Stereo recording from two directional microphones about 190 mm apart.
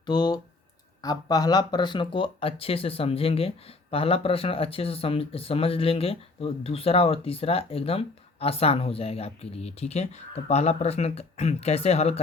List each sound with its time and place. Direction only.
0.0 s speech: 20° left (ahead or behind)